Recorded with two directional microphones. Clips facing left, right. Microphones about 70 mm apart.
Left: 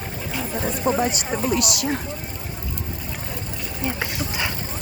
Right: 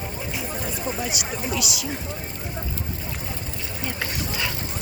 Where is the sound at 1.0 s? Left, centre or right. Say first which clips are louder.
Left 6 dB; left.